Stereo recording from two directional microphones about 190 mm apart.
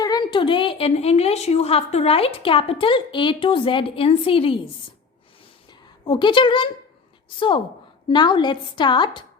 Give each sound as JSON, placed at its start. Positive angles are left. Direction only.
{"t": 0.0, "sound": "a woman's voice", "side_deg": 20}
{"t": 6.1, "sound": "a woman's voice", "side_deg": 25}